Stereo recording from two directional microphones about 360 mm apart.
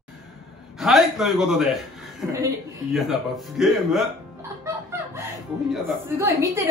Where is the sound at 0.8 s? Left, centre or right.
Centre.